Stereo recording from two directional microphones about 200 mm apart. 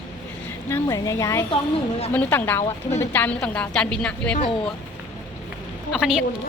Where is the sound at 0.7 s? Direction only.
15° left (ahead or behind).